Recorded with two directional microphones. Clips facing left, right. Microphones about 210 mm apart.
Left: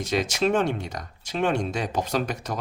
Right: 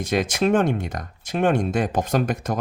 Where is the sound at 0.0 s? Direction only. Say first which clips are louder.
Right 3 dB; 50° right (ahead or behind).